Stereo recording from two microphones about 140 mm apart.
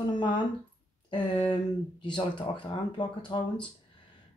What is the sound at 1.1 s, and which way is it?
Speech, 35° left (ahead or behind).